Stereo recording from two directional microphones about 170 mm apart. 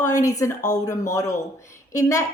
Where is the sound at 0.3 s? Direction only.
20° left (ahead or behind).